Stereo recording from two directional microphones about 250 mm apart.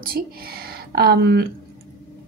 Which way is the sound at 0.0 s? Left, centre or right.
Right.